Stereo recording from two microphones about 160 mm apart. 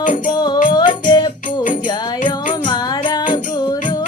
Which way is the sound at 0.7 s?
25° left (ahead or behind).